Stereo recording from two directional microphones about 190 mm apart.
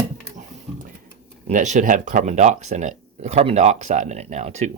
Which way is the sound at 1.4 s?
40° right (ahead or behind).